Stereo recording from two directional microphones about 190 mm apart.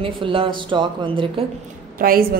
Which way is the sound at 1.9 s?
50° right (ahead or behind).